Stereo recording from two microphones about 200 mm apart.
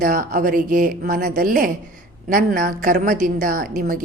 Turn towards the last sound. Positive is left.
turn(degrees=-45)  # may be behind; listen again after turning